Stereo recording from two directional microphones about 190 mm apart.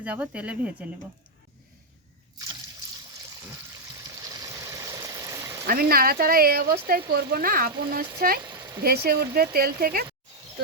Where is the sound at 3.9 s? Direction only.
20° right (ahead or behind).